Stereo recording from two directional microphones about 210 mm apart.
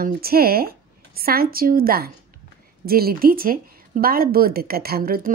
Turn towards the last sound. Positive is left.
turn(degrees=-45)  # may be behind; listen again after turning